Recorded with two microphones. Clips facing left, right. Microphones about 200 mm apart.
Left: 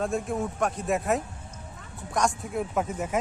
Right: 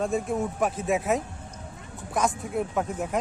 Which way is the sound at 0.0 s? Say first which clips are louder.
Right 2 dB; centre (ahead or behind).